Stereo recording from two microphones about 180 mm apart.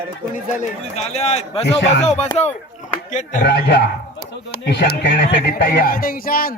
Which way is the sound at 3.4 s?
65° left (ahead or behind).